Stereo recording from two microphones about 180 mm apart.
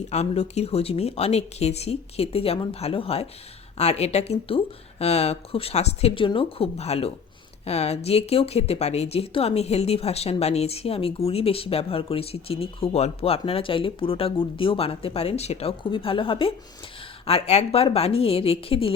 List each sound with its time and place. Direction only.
0.1 s speech: 40° left (ahead or behind)